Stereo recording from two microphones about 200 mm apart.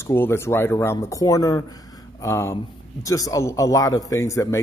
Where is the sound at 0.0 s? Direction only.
10° left (ahead or behind).